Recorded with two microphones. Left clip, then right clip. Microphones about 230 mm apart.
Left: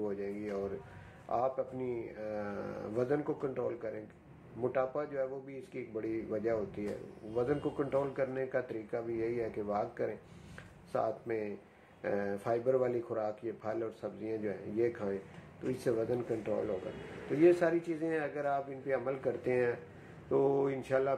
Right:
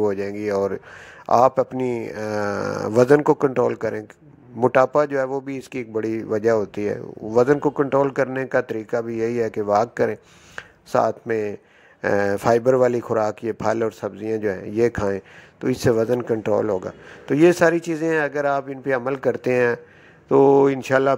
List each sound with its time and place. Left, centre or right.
0.0 s speech: right